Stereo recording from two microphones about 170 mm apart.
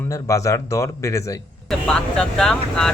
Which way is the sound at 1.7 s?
5° left (ahead or behind).